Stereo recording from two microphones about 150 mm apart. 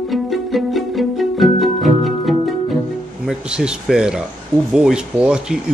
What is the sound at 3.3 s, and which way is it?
Speech, 5° right (ahead or behind).